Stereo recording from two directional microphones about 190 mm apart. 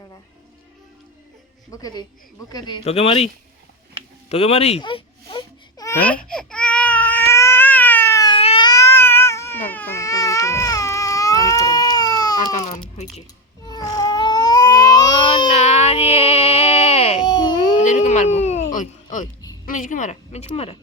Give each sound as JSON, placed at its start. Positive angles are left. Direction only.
{"t": 1.7, "sound": "speech", "side_deg": 20}
{"t": 4.3, "sound": "baby cry", "side_deg": 35}
{"t": 8.4, "sound": "baby cry", "side_deg": 30}
{"t": 13.7, "sound": "baby cry", "side_deg": 20}
{"t": 15.5, "sound": "baby cry", "side_deg": 35}
{"t": 17.7, "sound": "baby cry", "side_deg": 40}
{"t": 19.6, "sound": "speech", "side_deg": 45}